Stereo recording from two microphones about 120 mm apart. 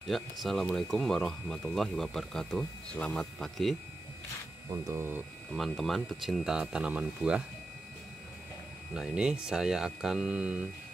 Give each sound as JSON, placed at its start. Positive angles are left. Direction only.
{"t": 0.0, "sound": "speech", "side_deg": 0}
{"t": 4.6, "sound": "speech", "side_deg": -25}
{"t": 5.5, "sound": "speech", "side_deg": 0}
{"t": 8.9, "sound": "speech", "side_deg": -5}